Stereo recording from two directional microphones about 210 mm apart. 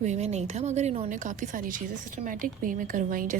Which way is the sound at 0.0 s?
30° right (ahead or behind).